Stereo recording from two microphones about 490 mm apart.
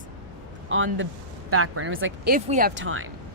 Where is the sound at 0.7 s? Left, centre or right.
Right.